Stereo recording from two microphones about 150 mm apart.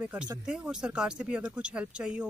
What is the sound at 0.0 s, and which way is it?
Speech, 10° right (ahead or behind).